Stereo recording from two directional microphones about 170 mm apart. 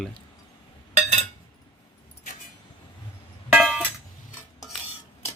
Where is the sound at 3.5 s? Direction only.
Centre (ahead or behind).